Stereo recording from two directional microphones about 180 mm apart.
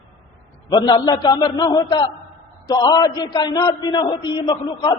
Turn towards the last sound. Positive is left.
turn(degrees=25)  # may be behind; listen again after turning